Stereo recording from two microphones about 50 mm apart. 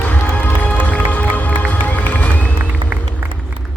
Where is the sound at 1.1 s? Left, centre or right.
Left.